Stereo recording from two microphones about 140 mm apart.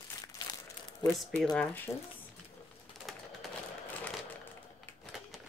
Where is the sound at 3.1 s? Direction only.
Centre (ahead or behind).